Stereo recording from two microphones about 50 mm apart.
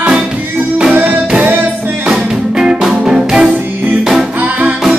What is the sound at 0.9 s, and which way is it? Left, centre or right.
Music, right.